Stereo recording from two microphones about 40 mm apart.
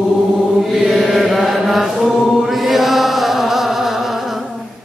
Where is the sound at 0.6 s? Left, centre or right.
Centre.